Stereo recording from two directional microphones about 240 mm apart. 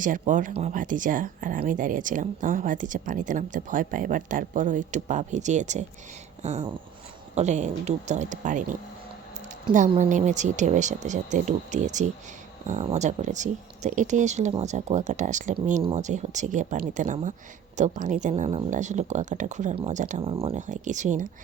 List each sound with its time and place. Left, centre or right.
0.0 s speech: right
6.4 s a sound: right
7.3 s speech: right
9.9 s speech: right